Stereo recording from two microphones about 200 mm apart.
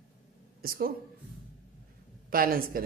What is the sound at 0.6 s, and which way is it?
Speech, 45° right (ahead or behind).